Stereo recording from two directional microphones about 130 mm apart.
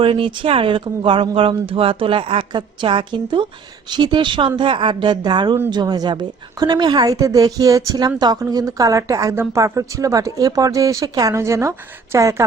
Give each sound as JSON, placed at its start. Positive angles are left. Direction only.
{"t": 0.0, "sound": "a woman's voice", "side_deg": -40}